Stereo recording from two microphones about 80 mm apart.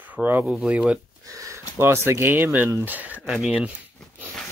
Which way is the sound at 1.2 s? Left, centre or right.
Right.